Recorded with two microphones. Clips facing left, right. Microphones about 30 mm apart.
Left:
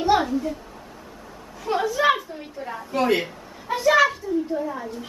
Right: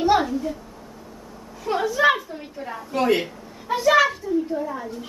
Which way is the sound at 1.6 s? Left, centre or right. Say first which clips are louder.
Right 2 dB; centre.